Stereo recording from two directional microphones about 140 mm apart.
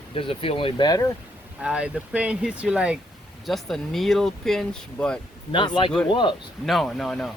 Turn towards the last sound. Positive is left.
turn(degrees=0)  # may be behind; listen again after turning